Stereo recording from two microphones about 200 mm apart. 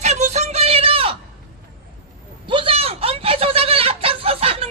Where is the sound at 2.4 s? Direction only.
25° right (ahead or behind).